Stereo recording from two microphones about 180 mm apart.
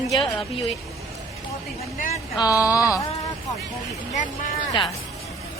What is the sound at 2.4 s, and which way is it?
Speech, 15° left (ahead or behind).